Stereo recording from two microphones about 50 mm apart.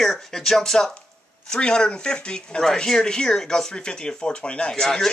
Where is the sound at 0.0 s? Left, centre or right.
Centre.